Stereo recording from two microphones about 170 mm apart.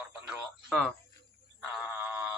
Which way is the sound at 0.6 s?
Centre (ahead or behind).